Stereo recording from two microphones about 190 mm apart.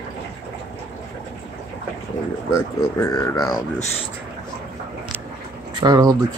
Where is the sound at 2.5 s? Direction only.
15° left (ahead or behind).